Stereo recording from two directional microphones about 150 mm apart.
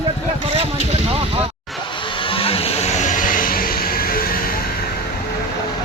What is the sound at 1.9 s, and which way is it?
Vehicle, 35° left (ahead or behind).